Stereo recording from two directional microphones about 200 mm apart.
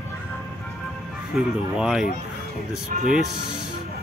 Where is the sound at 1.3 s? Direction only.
Centre (ahead or behind).